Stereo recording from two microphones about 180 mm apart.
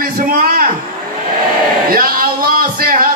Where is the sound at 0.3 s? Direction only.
55° right (ahead or behind).